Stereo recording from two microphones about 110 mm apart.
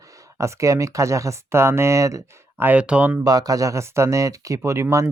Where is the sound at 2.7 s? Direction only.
10° right (ahead or behind).